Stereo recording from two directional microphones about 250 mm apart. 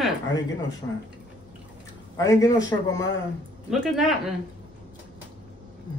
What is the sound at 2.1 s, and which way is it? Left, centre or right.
Speech, centre.